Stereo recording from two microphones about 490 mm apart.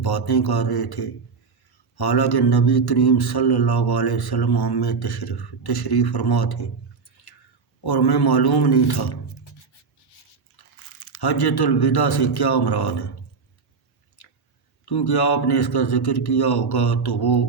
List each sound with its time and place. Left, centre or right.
0.0 s a man's voice: left
7.9 s a man's voice: left
11.2 s a man's voice: left
14.8 s a man's voice: left